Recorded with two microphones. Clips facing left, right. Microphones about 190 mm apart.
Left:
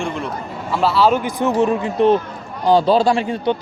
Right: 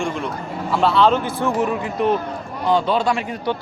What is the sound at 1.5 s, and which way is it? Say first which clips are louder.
A man's voice: left 4 dB; 30° left (ahead or behind).